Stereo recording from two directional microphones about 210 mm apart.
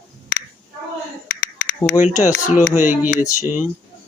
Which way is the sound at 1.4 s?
50° left (ahead or behind).